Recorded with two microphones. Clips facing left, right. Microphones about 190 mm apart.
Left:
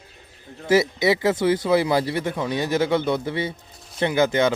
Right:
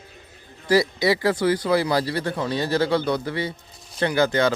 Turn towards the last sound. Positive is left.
turn(degrees=20)  # may be behind; listen again after turning